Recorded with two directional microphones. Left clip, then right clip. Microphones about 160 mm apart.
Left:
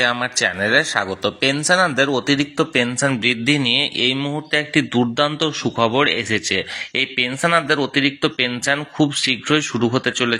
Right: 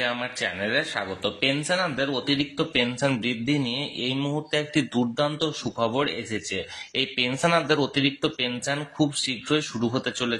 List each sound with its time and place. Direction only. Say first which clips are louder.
0.0 s speech: left 9 dB; 45° left (ahead or behind)
3.1 s speech: left 8 dB; 20° left (ahead or behind)
4.9 s speech: left 7 dB; 25° left (ahead or behind)
7.0 s speech: left 5 dB; 10° left (ahead or behind); by 10.3 s 25° left (ahead or behind)